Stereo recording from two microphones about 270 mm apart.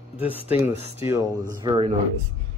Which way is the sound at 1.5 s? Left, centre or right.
Centre.